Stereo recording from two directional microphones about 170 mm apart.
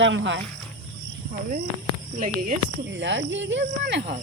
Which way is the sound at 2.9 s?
90° right.